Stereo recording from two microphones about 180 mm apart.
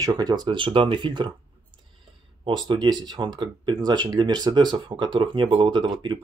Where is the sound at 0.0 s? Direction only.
20° right (ahead or behind).